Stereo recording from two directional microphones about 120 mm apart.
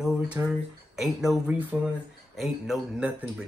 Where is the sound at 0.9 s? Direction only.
Centre (ahead or behind).